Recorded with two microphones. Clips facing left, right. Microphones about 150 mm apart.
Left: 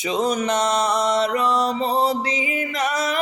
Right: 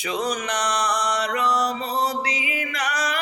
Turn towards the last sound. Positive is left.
turn(degrees=25)  # may be behind; listen again after turning